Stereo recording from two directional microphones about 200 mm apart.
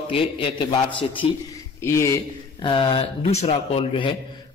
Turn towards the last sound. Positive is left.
turn(degrees=25)  # may be behind; listen again after turning